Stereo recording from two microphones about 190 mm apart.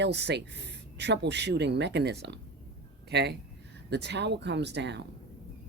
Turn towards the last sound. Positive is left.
turn(degrees=-65)  # may be behind; listen again after turning